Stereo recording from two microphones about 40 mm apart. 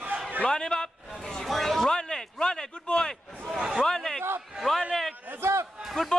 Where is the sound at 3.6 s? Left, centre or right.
Centre.